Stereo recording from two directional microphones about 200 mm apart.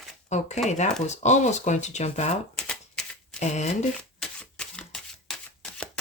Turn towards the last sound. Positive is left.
turn(degrees=0)  # may be behind; listen again after turning